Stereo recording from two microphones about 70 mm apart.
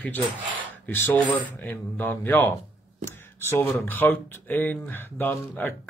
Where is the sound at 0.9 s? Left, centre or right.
Left.